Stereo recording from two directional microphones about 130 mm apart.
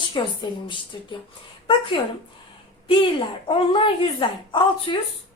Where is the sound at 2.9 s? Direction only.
40° left (ahead or behind).